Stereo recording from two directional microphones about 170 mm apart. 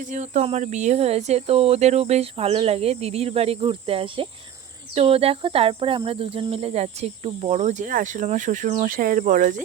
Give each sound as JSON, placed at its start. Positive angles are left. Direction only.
{"t": 0.1, "sound": "cricket", "side_deg": -45}